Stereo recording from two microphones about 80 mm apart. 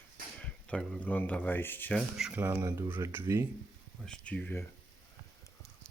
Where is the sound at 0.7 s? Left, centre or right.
Centre.